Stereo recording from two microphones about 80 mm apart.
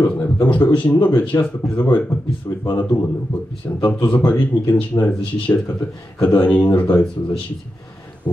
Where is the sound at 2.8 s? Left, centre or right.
Left.